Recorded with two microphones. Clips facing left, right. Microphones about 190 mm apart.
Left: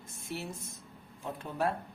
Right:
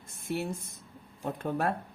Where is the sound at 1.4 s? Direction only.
55° right (ahead or behind).